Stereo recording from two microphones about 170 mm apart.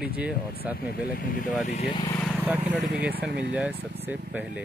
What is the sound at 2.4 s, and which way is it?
Speech, 10° right (ahead or behind).